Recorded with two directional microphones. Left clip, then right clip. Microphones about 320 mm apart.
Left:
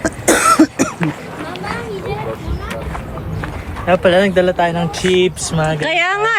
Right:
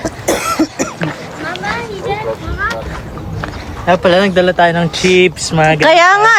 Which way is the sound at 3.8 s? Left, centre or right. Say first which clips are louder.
Right 2 dB; right.